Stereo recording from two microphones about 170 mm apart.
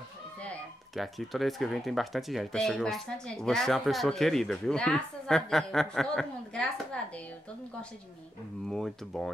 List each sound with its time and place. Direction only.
0.9 s speech: centre (ahead or behind)
8.6 s speech: centre (ahead or behind)